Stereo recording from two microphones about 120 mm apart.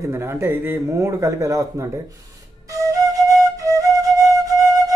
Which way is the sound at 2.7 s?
30° right (ahead or behind).